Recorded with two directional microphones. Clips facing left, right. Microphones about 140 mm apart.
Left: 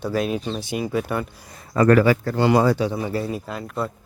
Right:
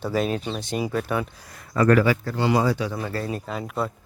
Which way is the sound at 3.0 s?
10° left (ahead or behind).